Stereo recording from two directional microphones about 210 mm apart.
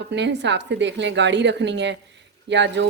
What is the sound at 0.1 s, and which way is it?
Speech, 55° right (ahead or behind).